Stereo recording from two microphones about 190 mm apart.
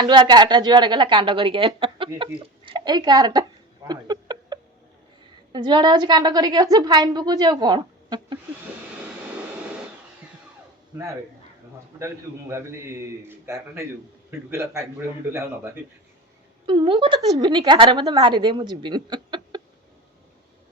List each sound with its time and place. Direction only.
0.0 s a woman's voice: 25° right (ahead or behind)
3.8 s a sound: 20° right (ahead or behind)
5.5 s a woman's voice: 25° right (ahead or behind)
10.9 s a man's voice: 15° right (ahead or behind)
16.6 s a woman's voice: 25° right (ahead or behind)